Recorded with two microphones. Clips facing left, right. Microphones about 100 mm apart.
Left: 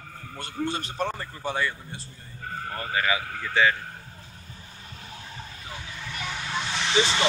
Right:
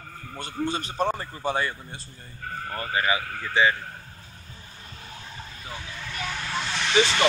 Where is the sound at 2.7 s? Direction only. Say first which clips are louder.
Right 1 dB; 25° right (ahead or behind).